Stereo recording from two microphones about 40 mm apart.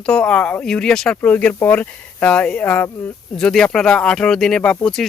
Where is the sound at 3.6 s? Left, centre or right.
Centre.